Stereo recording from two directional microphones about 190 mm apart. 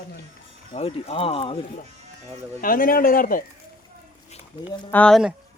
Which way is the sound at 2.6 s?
50° left (ahead or behind).